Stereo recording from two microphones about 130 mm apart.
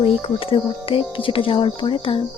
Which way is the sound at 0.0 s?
45° left (ahead or behind).